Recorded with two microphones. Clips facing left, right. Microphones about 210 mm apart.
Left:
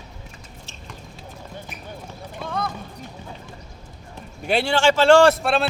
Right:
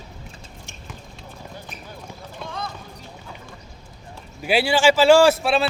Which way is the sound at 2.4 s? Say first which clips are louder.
Left 5 dB; 55° left (ahead or behind).